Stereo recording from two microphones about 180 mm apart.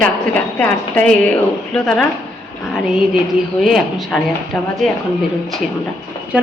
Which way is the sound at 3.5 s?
Centre (ahead or behind).